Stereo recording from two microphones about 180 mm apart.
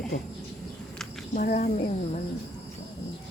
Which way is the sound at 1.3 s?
50° left (ahead or behind).